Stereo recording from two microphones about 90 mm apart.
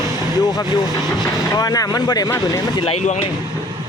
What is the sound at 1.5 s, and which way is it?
Speech, 40° left (ahead or behind).